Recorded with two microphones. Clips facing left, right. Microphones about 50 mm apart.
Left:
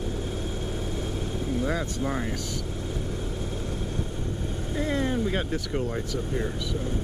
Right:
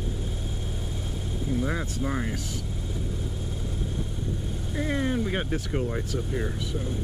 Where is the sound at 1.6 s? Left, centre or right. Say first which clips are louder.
Left 2 dB; centre.